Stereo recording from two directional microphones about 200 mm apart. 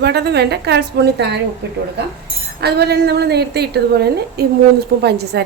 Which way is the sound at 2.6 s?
55° right (ahead or behind).